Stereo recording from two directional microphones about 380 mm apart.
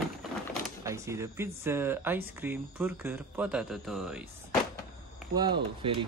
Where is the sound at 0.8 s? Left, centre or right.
Centre.